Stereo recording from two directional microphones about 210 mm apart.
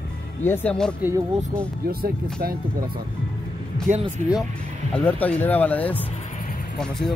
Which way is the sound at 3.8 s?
35° right (ahead or behind).